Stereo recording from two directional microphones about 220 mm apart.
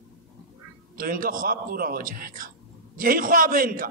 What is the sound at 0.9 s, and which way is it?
A man's voice, 40° right (ahead or behind).